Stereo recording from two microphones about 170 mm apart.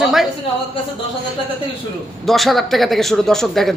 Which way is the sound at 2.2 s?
Centre (ahead or behind).